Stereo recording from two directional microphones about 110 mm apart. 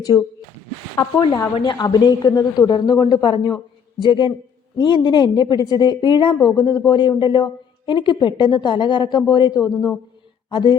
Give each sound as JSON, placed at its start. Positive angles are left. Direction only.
{"t": 0.1, "sound": "speech", "side_deg": 20}
{"t": 1.6, "sound": "speech", "side_deg": 40}